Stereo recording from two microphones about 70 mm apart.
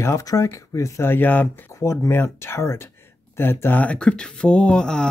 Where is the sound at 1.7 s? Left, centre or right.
Left.